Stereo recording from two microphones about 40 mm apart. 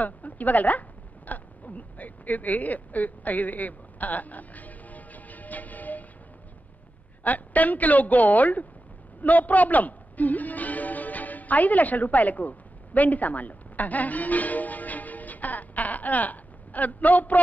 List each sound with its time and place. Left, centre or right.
0.0 s a sound: left
7.2 s a woman's voice: left
9.2 s music: left